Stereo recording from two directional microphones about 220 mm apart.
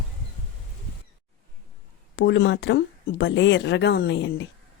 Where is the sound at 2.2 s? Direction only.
55° left (ahead or behind).